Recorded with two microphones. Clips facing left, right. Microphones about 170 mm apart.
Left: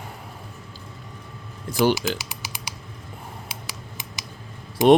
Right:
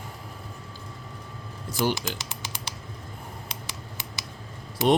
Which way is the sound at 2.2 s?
10° left (ahead or behind).